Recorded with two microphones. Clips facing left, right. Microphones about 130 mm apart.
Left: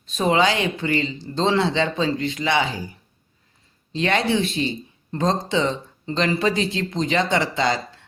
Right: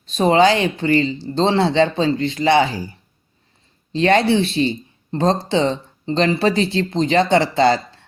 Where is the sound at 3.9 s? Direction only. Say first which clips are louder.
Right 6 dB; 35° right (ahead or behind).